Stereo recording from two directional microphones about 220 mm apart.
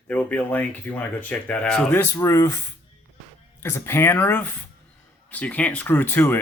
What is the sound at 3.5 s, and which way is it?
Speech, 10° left (ahead or behind).